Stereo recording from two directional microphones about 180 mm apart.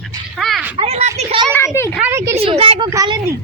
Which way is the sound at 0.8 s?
35° right (ahead or behind).